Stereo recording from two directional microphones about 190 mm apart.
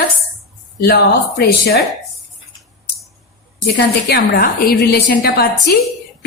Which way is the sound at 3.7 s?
55° left (ahead or behind).